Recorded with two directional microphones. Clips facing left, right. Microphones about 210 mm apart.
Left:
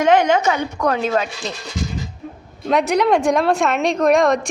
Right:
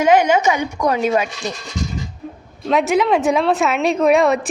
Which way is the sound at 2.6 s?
Centre (ahead or behind).